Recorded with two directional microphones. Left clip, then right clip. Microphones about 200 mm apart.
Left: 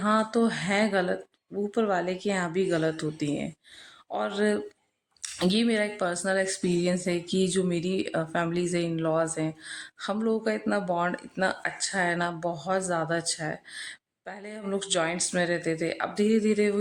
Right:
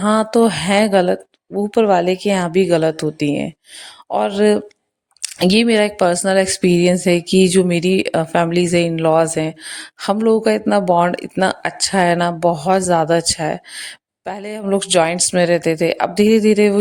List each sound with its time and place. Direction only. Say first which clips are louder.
0.0 s speech: right 11 dB; 40° right (ahead or behind)